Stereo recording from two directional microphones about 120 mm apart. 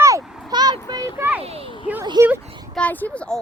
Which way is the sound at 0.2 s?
5° right (ahead or behind).